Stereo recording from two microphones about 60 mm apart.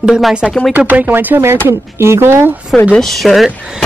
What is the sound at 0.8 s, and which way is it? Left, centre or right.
Speech, right.